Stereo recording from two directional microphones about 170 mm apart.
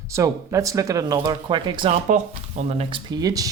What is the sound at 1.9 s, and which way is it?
Speech, 45° right (ahead or behind).